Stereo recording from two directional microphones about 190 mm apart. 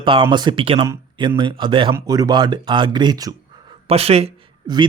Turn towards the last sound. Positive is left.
turn(degrees=-30)  # may be behind; listen again after turning